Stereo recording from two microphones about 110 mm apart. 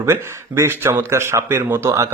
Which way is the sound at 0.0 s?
25° right (ahead or behind).